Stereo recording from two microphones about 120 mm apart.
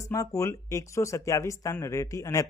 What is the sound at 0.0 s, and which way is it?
A man's voice, 25° left (ahead or behind).